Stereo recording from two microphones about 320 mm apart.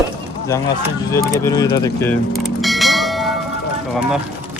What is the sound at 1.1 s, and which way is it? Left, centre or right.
Speech, centre.